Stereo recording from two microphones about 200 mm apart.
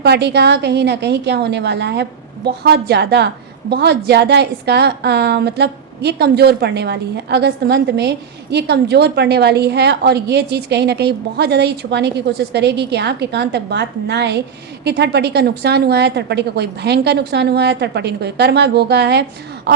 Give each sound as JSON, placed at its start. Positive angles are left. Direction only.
{"t": 0.0, "sound": "a woman's voice", "side_deg": -55}